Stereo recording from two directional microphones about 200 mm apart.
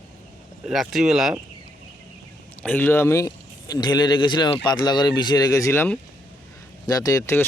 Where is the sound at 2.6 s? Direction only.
10° left (ahead or behind).